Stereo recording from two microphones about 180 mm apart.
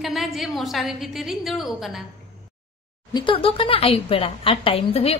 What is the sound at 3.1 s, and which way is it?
Speech, 30° left (ahead or behind).